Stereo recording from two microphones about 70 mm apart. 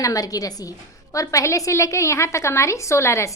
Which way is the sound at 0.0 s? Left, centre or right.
Left.